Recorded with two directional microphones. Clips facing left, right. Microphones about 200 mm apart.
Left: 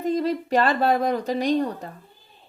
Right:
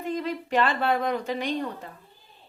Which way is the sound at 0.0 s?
40° left (ahead or behind).